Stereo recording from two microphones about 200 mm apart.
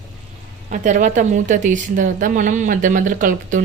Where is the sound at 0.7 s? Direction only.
40° right (ahead or behind).